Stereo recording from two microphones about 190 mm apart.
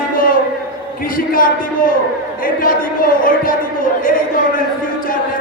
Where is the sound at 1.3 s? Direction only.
45° left (ahead or behind).